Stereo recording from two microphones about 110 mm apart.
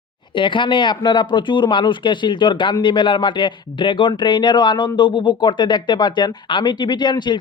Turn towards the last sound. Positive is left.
turn(degrees=45)  # may be behind; listen again after turning